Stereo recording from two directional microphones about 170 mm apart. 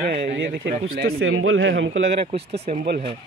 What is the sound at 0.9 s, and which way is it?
A man's voice, 65° right (ahead or behind).